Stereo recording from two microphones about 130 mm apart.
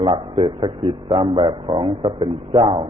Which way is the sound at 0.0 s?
40° right (ahead or behind).